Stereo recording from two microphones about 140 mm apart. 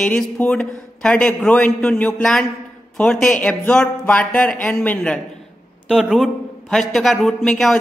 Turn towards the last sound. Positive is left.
turn(degrees=0)  # may be behind; listen again after turning